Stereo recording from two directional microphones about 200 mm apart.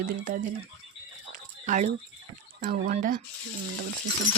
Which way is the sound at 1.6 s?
40° right (ahead or behind).